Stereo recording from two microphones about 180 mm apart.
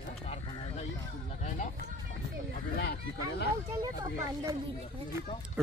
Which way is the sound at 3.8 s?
25° right (ahead or behind).